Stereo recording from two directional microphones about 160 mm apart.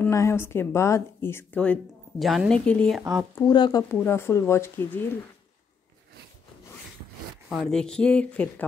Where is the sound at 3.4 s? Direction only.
25° left (ahead or behind).